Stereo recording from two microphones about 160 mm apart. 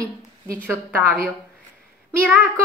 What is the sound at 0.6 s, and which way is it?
Speech, 10° right (ahead or behind).